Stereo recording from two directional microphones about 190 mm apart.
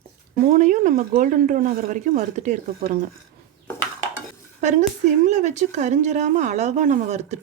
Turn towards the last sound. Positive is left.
turn(degrees=-35)  # may be behind; listen again after turning